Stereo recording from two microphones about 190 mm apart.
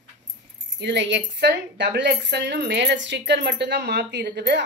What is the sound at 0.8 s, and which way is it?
A woman's voice, 65° right (ahead or behind).